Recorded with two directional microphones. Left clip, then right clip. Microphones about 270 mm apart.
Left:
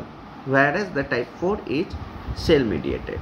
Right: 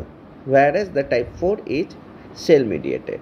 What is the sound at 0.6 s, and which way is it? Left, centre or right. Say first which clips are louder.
Speech: right 4 dB; centre.